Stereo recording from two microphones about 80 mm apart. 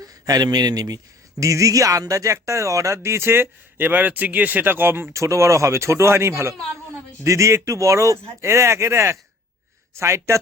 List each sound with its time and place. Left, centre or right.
0.0 s speech: right
1.4 s speech: right